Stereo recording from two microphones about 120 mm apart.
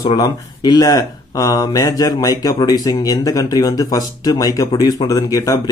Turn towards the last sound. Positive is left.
turn(degrees=30)  # may be behind; listen again after turning